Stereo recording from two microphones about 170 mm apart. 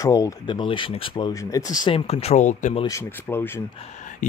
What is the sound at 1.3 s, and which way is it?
Speech, 20° left (ahead or behind).